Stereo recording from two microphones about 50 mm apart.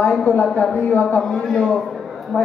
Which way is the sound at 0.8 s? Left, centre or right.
Left.